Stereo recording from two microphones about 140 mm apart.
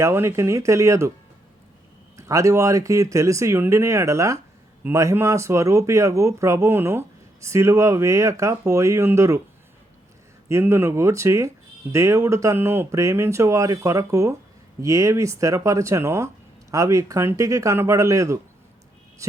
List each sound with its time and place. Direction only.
0.0 s speech: 20° right (ahead or behind)
2.1 s speech: 25° right (ahead or behind)
10.5 s speech: 20° right (ahead or behind)